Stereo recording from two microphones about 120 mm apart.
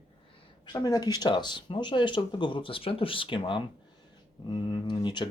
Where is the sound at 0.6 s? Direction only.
40° left (ahead or behind).